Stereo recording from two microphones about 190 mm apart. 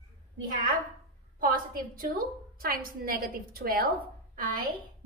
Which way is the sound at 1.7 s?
50° right (ahead or behind).